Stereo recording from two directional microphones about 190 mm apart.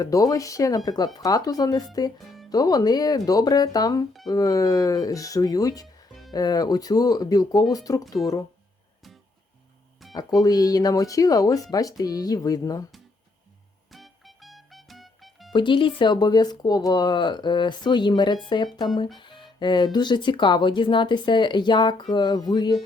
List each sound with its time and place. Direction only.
0.0 s speech: 20° left (ahead or behind)
2.1 s music: centre (ahead or behind)
2.5 s speech: 20° left (ahead or behind)
10.0 s music: centre (ahead or behind)
10.4 s speech: 20° left (ahead or behind)
13.9 s music: centre (ahead or behind)
15.5 s speech: 25° left (ahead or behind)